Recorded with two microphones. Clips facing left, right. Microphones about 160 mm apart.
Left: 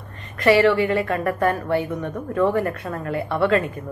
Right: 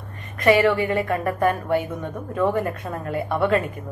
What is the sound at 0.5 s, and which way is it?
A woman's voice, 20° right (ahead or behind).